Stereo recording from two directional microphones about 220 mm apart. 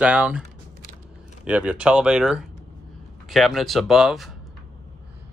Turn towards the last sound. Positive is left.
turn(degrees=0)  # may be behind; listen again after turning